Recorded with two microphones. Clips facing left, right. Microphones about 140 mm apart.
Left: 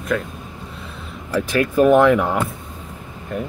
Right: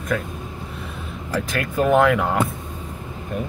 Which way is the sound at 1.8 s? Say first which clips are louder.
Left 4 dB; 15° left (ahead or behind).